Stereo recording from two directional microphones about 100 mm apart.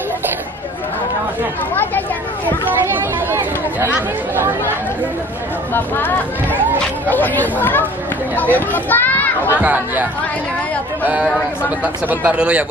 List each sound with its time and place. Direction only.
2.9 s chatter: 20° right (ahead or behind)
4.4 s speech: 25° right (ahead or behind)
5.7 s speech: 20° left (ahead or behind)
9.6 s speech: 15° right (ahead or behind)
11.8 s speech: 15° right (ahead or behind)